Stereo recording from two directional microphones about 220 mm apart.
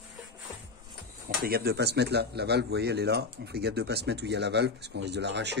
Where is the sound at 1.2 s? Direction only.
45° right (ahead or behind).